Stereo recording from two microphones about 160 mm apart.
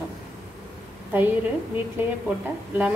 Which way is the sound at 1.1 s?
10° right (ahead or behind).